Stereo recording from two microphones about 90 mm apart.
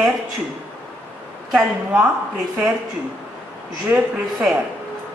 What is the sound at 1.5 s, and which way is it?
Speech, 10° right (ahead or behind).